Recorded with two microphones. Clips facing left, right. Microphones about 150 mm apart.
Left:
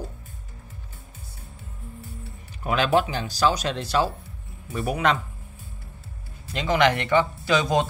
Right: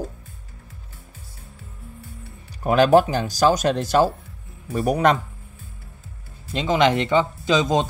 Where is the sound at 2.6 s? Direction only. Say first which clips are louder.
Right 7 dB; 40° right (ahead or behind).